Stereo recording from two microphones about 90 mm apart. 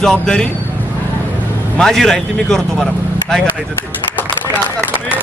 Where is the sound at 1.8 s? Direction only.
5° left (ahead or behind).